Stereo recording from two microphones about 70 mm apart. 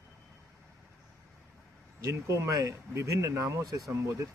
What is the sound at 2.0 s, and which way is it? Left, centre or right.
Speech, right.